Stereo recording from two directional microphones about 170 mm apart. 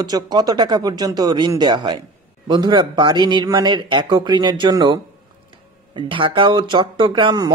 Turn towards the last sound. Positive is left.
turn(degrees=-25)  # may be behind; listen again after turning